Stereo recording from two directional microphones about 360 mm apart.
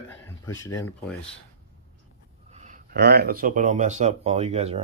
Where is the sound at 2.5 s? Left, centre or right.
Centre.